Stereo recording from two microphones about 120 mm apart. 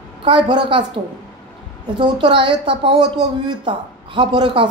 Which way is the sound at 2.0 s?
40° right (ahead or behind).